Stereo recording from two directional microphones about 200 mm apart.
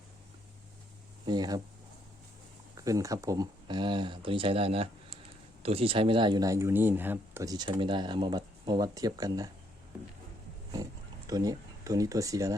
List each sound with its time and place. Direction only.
1.2 s speech: 20° right (ahead or behind)
2.7 s speech: 15° right (ahead or behind)
11.3 s speech: 20° right (ahead or behind)